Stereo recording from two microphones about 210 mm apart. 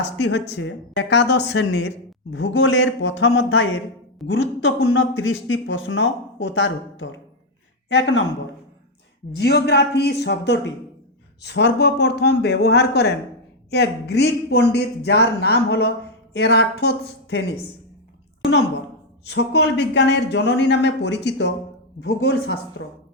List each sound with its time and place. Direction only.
0.0 s a man's voice: 55° left (ahead or behind)
9.3 s a man's voice: 50° left (ahead or behind)
19.3 s speech: 55° left (ahead or behind)